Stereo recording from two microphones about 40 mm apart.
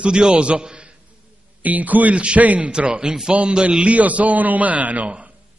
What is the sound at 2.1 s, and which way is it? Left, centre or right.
Speech, right.